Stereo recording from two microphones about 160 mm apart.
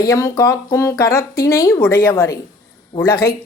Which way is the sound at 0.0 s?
20° left (ahead or behind).